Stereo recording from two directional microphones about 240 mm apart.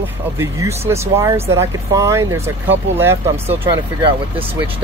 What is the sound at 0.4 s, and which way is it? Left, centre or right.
Speech, centre.